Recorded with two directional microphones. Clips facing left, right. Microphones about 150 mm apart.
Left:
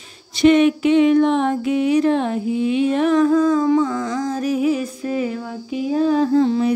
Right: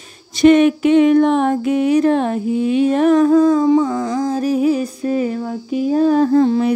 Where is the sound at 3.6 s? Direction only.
25° right (ahead or behind).